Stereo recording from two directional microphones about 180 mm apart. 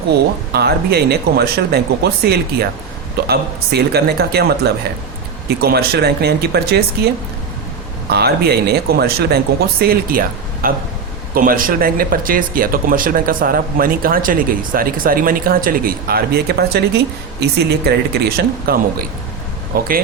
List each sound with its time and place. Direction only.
0.5 s speech: 65° right (ahead or behind)
8.1 s speech: 60° right (ahead or behind)